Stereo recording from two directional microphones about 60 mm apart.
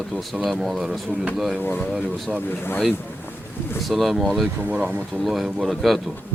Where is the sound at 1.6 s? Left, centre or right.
Left.